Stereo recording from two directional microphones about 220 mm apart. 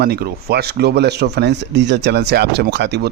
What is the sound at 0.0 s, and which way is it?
Speech, 45° right (ahead or behind).